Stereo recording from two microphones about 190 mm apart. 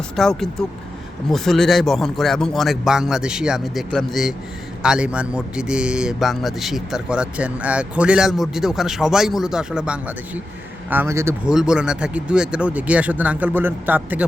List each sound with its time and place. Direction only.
0.2 s a man's voice: centre (ahead or behind)